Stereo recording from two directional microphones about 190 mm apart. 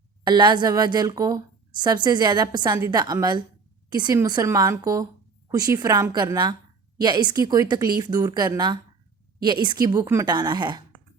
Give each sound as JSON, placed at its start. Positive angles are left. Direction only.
{"t": 0.3, "sound": "a woman's voice", "side_deg": -25}